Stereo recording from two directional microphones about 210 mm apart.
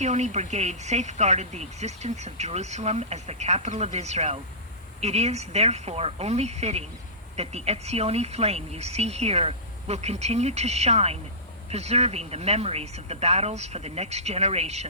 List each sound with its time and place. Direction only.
0.0 s speech: 35° right (ahead or behind)